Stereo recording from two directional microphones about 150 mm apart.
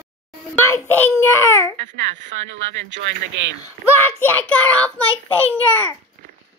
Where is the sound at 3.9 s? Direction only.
15° left (ahead or behind).